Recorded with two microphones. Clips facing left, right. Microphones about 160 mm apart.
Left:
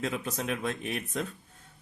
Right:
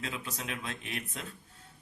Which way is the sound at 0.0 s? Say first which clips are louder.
Left 7 dB; 50° left (ahead or behind).